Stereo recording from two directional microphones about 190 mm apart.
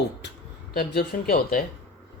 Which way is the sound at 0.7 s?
50° left (ahead or behind).